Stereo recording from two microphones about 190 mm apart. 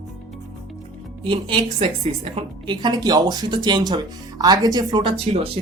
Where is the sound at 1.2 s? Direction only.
25° right (ahead or behind).